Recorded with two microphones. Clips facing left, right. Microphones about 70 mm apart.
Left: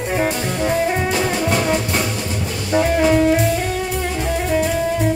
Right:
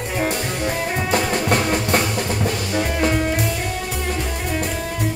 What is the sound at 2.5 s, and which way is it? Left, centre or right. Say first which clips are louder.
Music: left 5 dB; centre.